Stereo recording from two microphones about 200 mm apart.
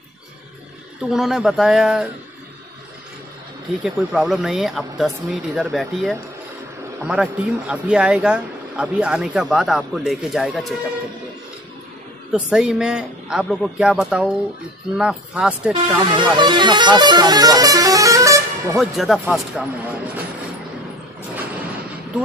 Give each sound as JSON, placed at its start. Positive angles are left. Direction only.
{"t": 1.1, "sound": "speech", "side_deg": 0}
{"t": 3.8, "sound": "speech", "side_deg": -5}
{"t": 12.3, "sound": "speech", "side_deg": 0}
{"t": 16.2, "sound": "speech", "side_deg": -25}
{"t": 18.8, "sound": "speech", "side_deg": 0}